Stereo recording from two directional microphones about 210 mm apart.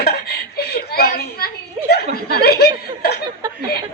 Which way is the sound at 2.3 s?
50° left (ahead or behind).